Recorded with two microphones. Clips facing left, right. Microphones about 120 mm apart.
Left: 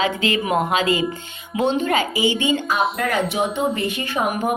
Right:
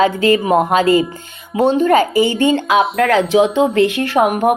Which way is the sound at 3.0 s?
90° right.